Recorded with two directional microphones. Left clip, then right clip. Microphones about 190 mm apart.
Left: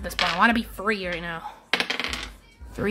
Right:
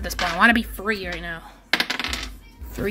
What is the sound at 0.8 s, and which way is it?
Speech, 15° left (ahead or behind).